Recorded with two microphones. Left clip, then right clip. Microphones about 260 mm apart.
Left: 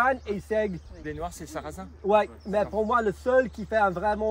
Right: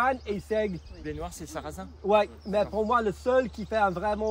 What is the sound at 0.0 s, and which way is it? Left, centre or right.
Speech, centre.